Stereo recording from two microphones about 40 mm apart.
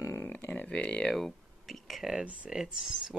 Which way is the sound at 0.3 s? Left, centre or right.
Left.